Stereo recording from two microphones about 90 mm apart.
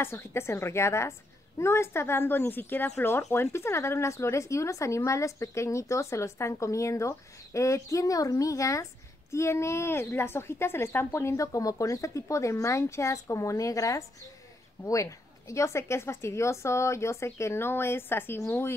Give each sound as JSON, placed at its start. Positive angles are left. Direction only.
{"t": 0.0, "sound": "a woman's voice", "side_deg": 30}